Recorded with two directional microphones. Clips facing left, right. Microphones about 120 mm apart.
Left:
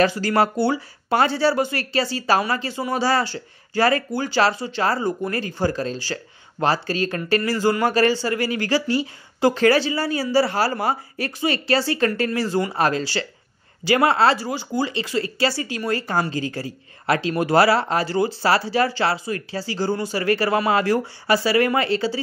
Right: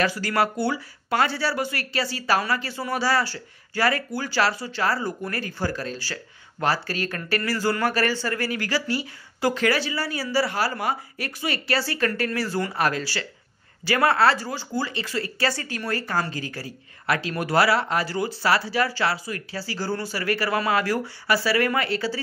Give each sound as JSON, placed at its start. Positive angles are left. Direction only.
{"t": 0.0, "sound": "speech", "side_deg": 25}